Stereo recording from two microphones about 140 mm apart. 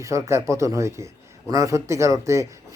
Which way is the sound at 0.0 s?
20° right (ahead or behind).